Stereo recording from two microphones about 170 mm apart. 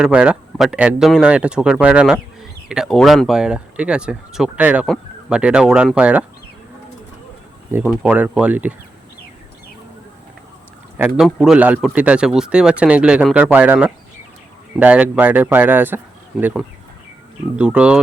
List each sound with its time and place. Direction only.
0.0 s speech: 5° right (ahead or behind)
7.7 s speech: 10° right (ahead or behind)
10.9 s speech: 10° right (ahead or behind)